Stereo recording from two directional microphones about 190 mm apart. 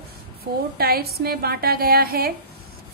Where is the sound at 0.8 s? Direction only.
55° right (ahead or behind).